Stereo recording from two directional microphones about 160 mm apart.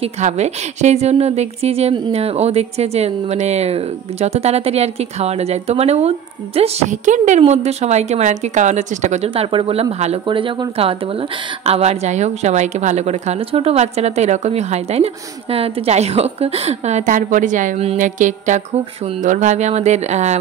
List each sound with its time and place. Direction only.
0.0 s speech: 45° right (ahead or behind)